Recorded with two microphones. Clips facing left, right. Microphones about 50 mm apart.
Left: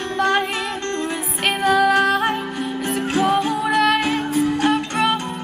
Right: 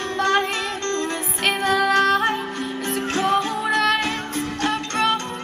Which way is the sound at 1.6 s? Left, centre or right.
Centre.